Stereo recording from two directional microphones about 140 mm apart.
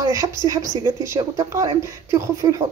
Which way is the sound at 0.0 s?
25° right (ahead or behind).